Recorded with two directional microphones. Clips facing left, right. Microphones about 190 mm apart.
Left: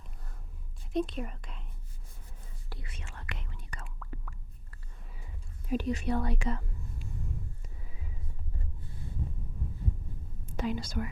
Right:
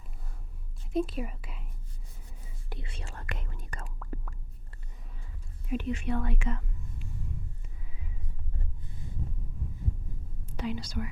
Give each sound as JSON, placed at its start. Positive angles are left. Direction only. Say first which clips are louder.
{"t": 0.9, "sound": "speech", "louder": "right 1 dB", "side_deg": -5}
{"t": 2.6, "sound": "whispering", "louder": "right 4 dB", "side_deg": -25}
{"t": 5.0, "sound": "a sound", "louder": "left 1 dB", "side_deg": 5}
{"t": 5.6, "sound": "speech", "louder": "left 1 dB", "side_deg": 35}
{"t": 10.6, "sound": "speech", "louder": "left 1 dB", "side_deg": 50}